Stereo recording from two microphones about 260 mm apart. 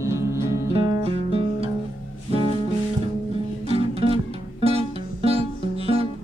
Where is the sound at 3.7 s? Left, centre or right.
Right.